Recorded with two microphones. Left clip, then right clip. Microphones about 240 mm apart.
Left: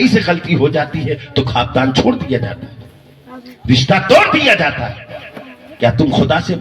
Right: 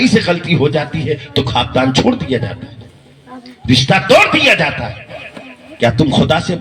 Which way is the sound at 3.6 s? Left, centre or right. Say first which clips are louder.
Right 1 dB; right.